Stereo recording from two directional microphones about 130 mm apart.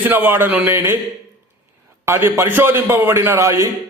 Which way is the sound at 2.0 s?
20° right (ahead or behind).